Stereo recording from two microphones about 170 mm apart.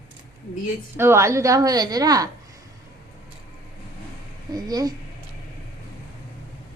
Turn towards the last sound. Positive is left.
turn(degrees=-20)  # may be behind; listen again after turning